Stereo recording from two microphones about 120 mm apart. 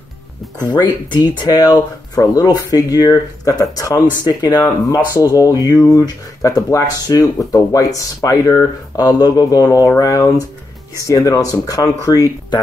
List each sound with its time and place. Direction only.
1.1 s speech: 40° left (ahead or behind)